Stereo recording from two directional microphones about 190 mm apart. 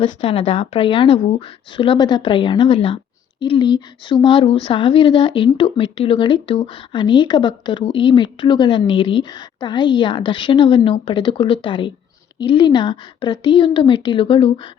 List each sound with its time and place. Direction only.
0.0 s speech: 30° left (ahead or behind)